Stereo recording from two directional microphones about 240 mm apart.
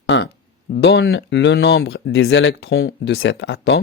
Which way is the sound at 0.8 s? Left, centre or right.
Left.